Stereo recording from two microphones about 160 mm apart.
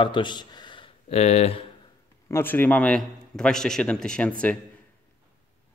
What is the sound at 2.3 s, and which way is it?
A man's voice, 15° left (ahead or behind).